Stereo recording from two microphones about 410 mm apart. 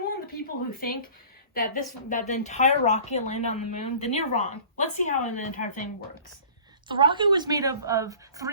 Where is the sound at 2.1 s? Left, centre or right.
Centre.